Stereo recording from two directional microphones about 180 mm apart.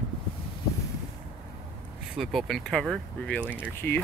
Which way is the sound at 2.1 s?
Centre (ahead or behind).